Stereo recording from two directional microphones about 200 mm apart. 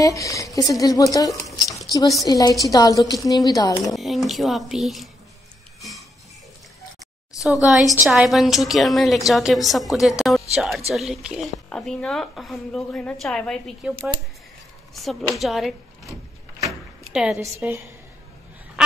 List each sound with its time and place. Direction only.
0.0 s speech: 15° left (ahead or behind)
1.4 s a sound: centre (ahead or behind)
1.9 s a woman's voice: 15° left (ahead or behind)
3.9 s a woman's voice: centre (ahead or behind)
5.8 s a sound: centre (ahead or behind)
7.6 s a woman's voice: centre (ahead or behind)
15.0 s a woman's voice: centre (ahead or behind)
16.1 s a sound: 15° right (ahead or behind)
17.1 s a woman's voice: 5° right (ahead or behind)